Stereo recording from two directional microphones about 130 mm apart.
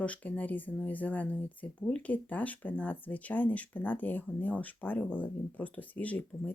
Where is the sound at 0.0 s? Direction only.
10° left (ahead or behind).